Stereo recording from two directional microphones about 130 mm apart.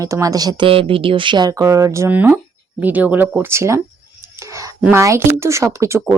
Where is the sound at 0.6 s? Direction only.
45° right (ahead or behind); by 3.8 s 20° right (ahead or behind).